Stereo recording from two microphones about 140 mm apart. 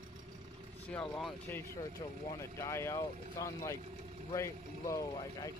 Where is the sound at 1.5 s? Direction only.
15° left (ahead or behind).